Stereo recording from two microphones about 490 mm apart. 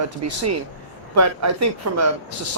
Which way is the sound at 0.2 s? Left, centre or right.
Right.